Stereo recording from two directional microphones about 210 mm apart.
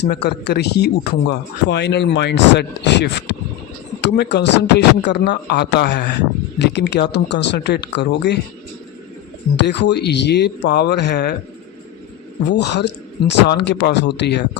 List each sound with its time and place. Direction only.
0.0 s speech: 50° left (ahead or behind)
9.6 s speech: 55° left (ahead or behind)
12.5 s speech: 55° left (ahead or behind)